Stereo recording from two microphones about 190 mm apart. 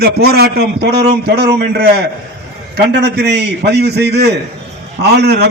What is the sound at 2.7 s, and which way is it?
A man's voice, 60° right (ahead or behind).